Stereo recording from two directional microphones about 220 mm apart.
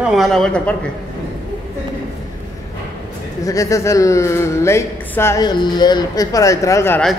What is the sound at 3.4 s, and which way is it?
A man's voice, 15° left (ahead or behind).